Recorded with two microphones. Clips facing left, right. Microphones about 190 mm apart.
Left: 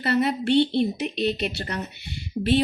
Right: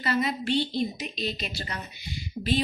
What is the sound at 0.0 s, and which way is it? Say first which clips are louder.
A woman's voice: left 5 dB; 65° left (ahead or behind).